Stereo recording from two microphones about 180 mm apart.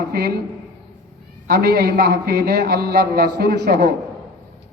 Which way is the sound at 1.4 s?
60° right (ahead or behind).